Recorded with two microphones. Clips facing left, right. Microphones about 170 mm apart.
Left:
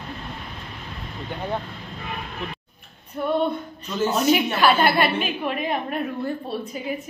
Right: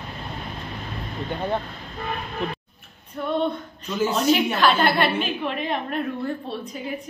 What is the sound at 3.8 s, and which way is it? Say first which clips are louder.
Speech: even; 10° right (ahead or behind).